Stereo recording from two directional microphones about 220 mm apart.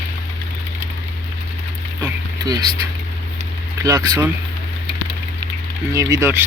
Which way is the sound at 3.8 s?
15° right (ahead or behind).